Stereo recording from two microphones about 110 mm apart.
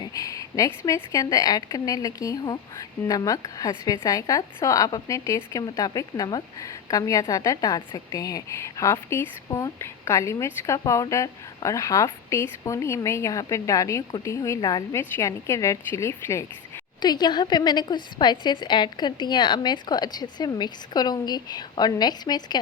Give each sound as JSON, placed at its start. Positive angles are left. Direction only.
{"t": 0.0, "sound": "a sound", "side_deg": 30}
{"t": 0.9, "sound": "a woman's voice", "side_deg": 30}
{"t": 17.0, "sound": "a woman's voice", "side_deg": 40}